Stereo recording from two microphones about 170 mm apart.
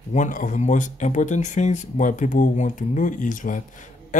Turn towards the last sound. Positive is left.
turn(degrees=50)  # may be behind; listen again after turning